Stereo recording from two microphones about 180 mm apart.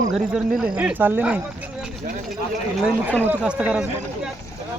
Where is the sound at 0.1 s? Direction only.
Centre (ahead or behind).